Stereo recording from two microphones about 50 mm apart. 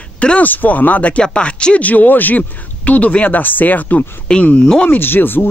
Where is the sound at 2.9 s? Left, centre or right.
Left.